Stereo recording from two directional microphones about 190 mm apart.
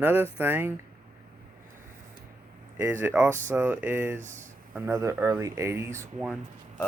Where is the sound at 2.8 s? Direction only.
10° right (ahead or behind).